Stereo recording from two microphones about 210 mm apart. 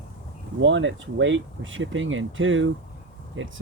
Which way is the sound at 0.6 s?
65° right (ahead or behind).